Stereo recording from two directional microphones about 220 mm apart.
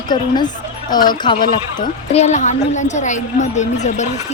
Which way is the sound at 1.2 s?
20° left (ahead or behind).